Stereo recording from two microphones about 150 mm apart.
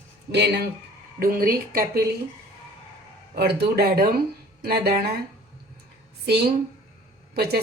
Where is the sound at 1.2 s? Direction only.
70° right (ahead or behind).